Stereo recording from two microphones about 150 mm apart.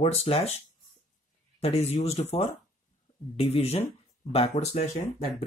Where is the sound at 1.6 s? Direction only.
45° left (ahead or behind).